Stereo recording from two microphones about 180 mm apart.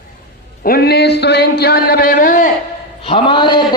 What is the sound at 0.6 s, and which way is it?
Speech, 55° left (ahead or behind).